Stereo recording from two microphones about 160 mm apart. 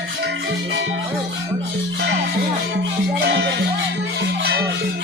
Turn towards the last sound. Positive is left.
turn(degrees=-90)